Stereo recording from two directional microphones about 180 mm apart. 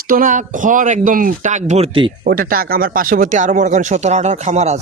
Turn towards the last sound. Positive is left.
turn(degrees=-40)  # may be behind; listen again after turning